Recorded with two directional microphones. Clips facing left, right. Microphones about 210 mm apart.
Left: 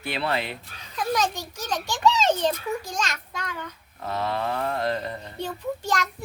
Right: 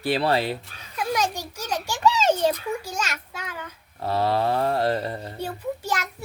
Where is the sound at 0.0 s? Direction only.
35° right (ahead or behind).